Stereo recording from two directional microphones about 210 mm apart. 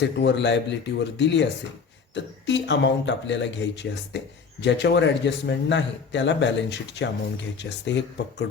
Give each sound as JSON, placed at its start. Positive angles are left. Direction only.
{"t": 0.0, "sound": "a man's voice", "side_deg": 55}